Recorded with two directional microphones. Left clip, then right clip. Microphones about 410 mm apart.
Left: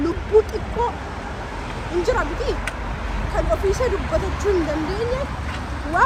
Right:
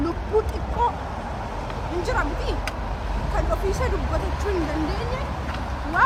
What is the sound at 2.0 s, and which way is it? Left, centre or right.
Speech, centre.